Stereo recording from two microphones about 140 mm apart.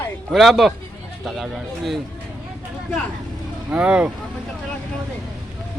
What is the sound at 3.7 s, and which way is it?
Speech, 10° right (ahead or behind).